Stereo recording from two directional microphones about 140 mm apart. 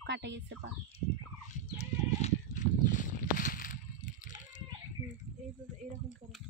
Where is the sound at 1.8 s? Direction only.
50° left (ahead or behind); by 4.6 s 70° left (ahead or behind).